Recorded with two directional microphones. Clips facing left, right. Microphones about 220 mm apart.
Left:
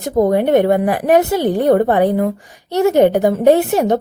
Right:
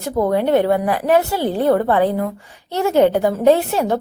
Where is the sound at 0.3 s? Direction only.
20° left (ahead or behind).